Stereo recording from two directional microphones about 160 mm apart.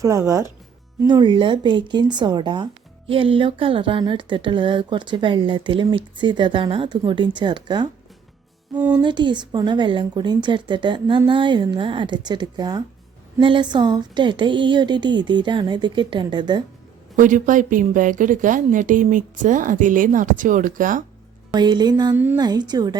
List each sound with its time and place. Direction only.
0.0 s a woman's voice: 20° right (ahead or behind)
9.0 s a woman's voice: 30° right (ahead or behind)
17.2 s a woman's voice: 55° right (ahead or behind)
21.5 s a woman's voice: 25° right (ahead or behind)
22.1 s speech: 10° right (ahead or behind)
22.4 s a woman's voice: 25° right (ahead or behind)